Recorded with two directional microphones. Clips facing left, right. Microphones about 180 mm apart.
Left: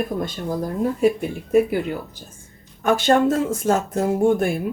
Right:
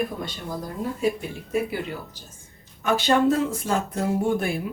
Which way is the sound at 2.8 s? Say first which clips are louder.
Left 3 dB; 50° left (ahead or behind).